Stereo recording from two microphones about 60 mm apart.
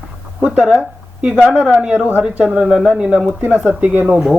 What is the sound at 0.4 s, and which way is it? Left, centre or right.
Speech, right.